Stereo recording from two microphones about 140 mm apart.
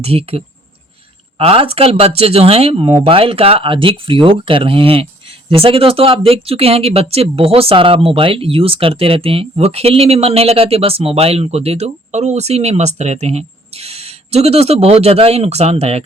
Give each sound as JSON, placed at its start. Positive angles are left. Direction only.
{"t": 0.0, "sound": "speech", "side_deg": -45}